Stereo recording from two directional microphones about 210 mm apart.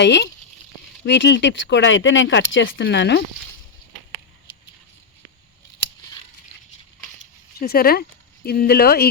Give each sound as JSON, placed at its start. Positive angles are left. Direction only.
{"t": 0.0, "sound": "speech", "side_deg": 55}
{"t": 7.6, "sound": "speech", "side_deg": 45}